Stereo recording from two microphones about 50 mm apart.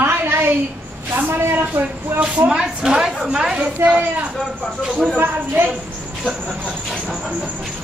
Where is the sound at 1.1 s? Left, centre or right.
Right.